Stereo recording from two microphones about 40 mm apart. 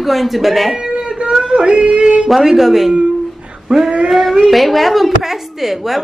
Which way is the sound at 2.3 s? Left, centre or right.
Centre.